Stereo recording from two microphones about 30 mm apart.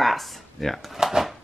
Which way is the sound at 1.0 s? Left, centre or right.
Right.